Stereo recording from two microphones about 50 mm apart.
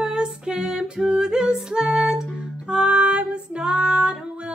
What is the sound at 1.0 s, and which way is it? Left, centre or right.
Music, centre.